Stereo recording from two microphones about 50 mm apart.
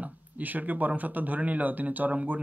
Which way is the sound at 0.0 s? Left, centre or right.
Right.